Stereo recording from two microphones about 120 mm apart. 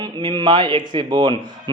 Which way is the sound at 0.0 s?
35° right (ahead or behind).